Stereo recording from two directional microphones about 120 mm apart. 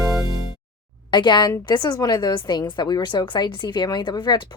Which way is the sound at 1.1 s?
40° left (ahead or behind).